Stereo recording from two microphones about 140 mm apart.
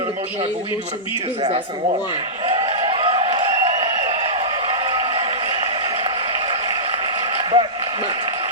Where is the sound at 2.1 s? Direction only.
35° right (ahead or behind).